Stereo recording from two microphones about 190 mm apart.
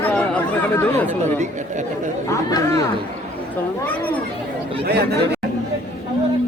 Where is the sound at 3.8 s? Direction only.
10° left (ahead or behind).